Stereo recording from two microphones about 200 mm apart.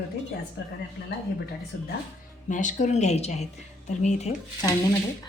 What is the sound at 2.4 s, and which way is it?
Speech, 40° left (ahead or behind).